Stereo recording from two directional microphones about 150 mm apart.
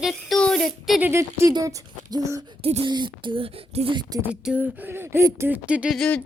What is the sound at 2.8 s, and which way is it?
Speech, 30° right (ahead or behind).